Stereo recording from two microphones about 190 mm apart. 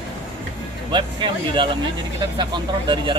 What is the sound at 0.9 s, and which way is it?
Speech, 25° right (ahead or behind).